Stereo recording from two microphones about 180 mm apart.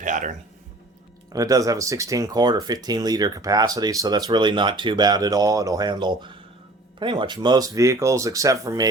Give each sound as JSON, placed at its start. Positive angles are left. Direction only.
{"t": 0.0, "sound": "speech", "side_deg": -45}
{"t": 1.3, "sound": "speech", "side_deg": -20}